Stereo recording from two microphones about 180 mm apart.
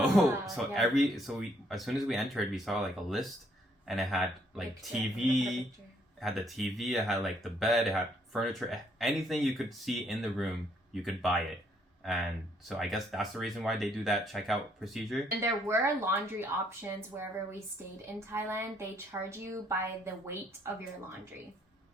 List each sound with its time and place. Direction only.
0.3 s speech: centre (ahead or behind)
15.4 s speech: 15° right (ahead or behind)
18.3 s speech: 15° right (ahead or behind)